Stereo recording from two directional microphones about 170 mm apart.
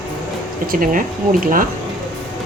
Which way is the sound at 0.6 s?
55° right (ahead or behind).